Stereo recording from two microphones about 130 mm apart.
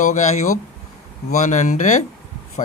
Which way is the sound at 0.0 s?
70° left (ahead or behind).